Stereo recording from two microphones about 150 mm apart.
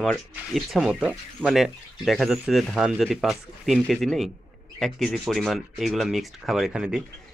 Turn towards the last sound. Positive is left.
turn(degrees=-5)  # may be behind; listen again after turning